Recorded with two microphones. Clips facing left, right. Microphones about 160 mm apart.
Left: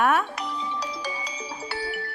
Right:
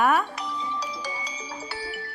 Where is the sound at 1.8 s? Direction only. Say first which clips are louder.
Left 4 dB; 55° left (ahead or behind).